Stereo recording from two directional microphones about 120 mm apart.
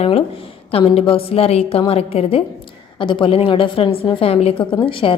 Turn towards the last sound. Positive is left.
turn(degrees=50)  # may be behind; listen again after turning